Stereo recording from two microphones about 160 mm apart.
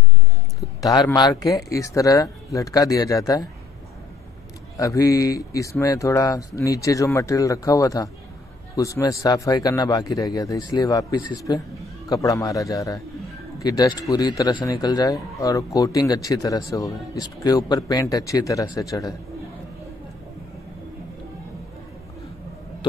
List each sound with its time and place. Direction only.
0.6 s speech: 20° left (ahead or behind)
4.7 s speech: 20° left (ahead or behind)